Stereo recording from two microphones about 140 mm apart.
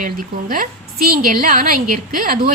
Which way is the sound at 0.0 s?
75° right (ahead or behind).